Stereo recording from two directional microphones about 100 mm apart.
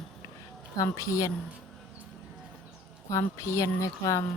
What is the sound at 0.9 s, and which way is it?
Speech, 30° left (ahead or behind).